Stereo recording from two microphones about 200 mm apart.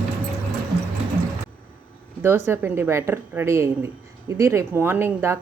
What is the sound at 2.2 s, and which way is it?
A woman's voice, 10° right (ahead or behind).